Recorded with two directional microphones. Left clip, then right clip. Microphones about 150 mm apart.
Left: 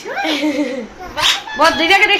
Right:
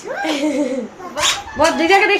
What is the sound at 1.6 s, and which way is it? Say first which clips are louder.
Speech: left 1 dB; 30° right (ahead or behind).